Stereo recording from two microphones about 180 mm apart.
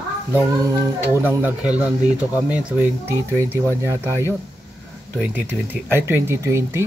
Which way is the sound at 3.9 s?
15° left (ahead or behind).